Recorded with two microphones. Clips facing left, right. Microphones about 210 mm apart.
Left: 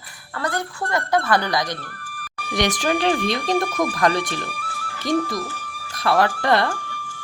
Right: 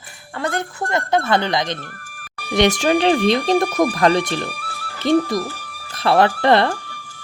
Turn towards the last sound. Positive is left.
turn(degrees=-30)  # may be behind; listen again after turning